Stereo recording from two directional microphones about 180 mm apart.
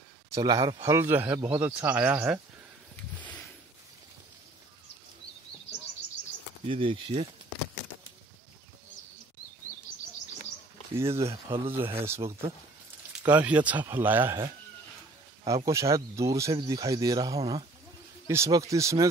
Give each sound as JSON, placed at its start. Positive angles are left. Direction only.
{"t": 0.3, "sound": "a man's voice", "side_deg": -20}
{"t": 6.7, "sound": "speech", "side_deg": -30}
{"t": 11.0, "sound": "a man's voice", "side_deg": -15}
{"t": 11.4, "sound": "speech", "side_deg": -30}
{"t": 11.7, "sound": "a man's voice", "side_deg": -15}
{"t": 13.2, "sound": "a man's voice", "side_deg": -10}
{"t": 15.4, "sound": "a man's voice", "side_deg": -20}